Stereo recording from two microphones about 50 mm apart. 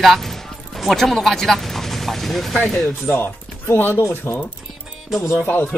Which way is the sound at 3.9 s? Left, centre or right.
Left.